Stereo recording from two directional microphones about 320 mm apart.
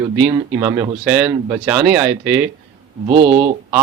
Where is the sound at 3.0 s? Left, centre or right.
Right.